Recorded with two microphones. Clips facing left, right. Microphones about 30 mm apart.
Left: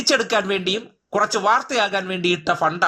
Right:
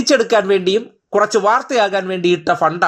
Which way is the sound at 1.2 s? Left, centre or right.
Centre.